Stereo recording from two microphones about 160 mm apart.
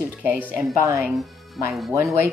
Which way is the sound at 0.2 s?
10° right (ahead or behind).